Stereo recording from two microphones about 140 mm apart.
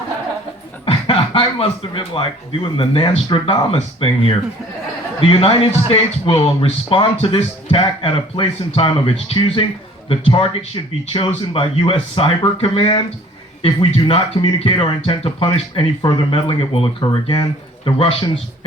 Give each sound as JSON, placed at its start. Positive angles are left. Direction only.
{"t": 0.9, "sound": "speech", "side_deg": 40}